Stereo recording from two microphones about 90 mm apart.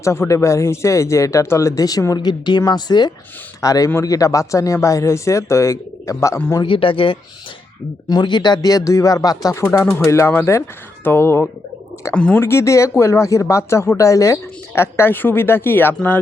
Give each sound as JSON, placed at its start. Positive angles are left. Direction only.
{"t": 0.0, "sound": "speech", "side_deg": 30}
{"t": 2.1, "sound": "speech", "side_deg": 55}
{"t": 3.6, "sound": "speech", "side_deg": 40}
{"t": 6.7, "sound": "speech", "side_deg": 80}
{"t": 8.1, "sound": "speech", "side_deg": 55}
{"t": 8.7, "sound": "speech", "side_deg": 35}
{"t": 12.1, "sound": "speech", "side_deg": 10}
{"t": 12.4, "sound": "speech", "side_deg": 30}